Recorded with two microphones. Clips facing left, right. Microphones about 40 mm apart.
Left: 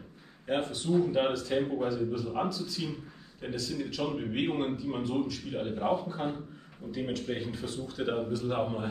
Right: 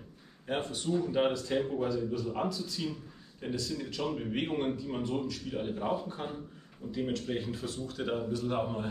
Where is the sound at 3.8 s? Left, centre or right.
Centre.